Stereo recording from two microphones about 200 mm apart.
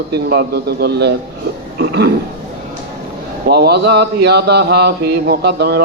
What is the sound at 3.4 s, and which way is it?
A man's voice, 55° right (ahead or behind).